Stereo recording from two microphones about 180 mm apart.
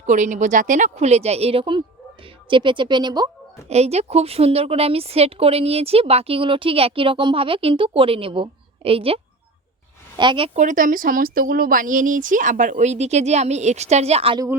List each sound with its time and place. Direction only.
0.0 s a woman's voice: 45° right (ahead or behind); by 3.2 s 25° right (ahead or behind)
3.7 s a woman's voice: 35° right (ahead or behind)
10.6 s speech: 45° right (ahead or behind)